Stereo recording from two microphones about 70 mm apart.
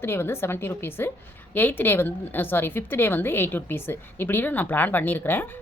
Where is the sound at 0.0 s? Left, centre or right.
Left.